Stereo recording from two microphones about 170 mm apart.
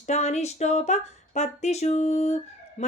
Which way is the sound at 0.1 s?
40° left (ahead or behind).